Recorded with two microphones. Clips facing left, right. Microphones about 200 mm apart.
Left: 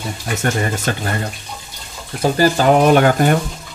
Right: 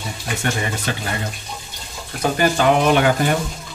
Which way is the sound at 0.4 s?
45° left (ahead or behind).